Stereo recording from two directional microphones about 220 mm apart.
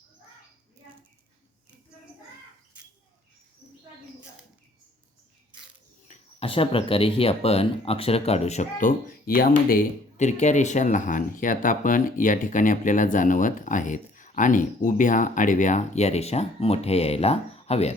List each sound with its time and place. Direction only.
6.1 s speech: 25° left (ahead or behind)